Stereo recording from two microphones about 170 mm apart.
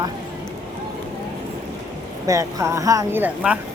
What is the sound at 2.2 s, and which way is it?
Speech, 20° right (ahead or behind).